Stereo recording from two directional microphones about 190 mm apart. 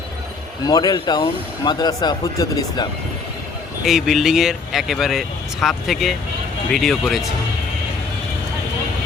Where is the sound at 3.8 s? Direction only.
Centre (ahead or behind).